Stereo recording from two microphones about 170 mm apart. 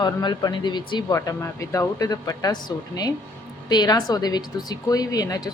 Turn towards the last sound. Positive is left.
turn(degrees=20)  # may be behind; listen again after turning